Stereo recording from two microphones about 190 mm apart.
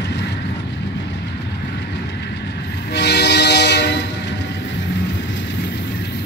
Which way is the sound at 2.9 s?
60° left (ahead or behind).